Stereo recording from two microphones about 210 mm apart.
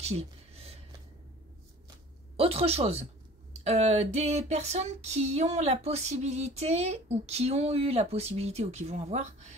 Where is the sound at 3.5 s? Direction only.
30° right (ahead or behind).